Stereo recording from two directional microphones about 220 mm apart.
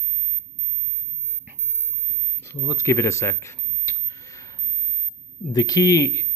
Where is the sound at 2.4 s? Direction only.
15° left (ahead or behind).